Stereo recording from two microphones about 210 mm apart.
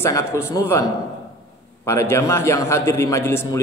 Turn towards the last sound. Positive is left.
turn(degrees=10)  # may be behind; listen again after turning